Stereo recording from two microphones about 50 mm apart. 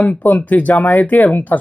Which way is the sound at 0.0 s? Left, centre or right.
Left.